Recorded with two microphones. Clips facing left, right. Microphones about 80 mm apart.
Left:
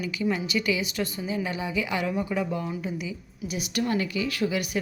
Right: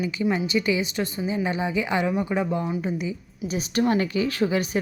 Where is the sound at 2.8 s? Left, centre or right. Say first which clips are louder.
Right 5 dB; right.